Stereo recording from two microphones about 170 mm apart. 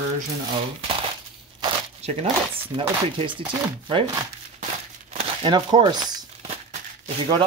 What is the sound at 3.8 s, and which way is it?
Speech, 30° right (ahead or behind).